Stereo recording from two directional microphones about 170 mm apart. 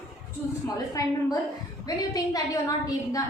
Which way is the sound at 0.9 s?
20° left (ahead or behind).